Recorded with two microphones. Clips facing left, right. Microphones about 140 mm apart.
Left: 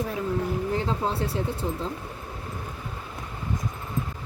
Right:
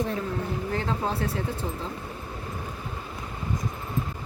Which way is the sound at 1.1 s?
30° left (ahead or behind).